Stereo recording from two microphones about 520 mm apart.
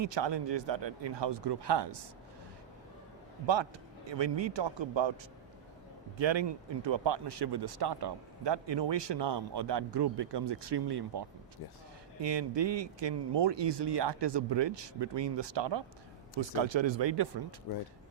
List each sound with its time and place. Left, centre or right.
0.0 s a man's voice: right
3.4 s speech: right
6.1 s a man's voice: right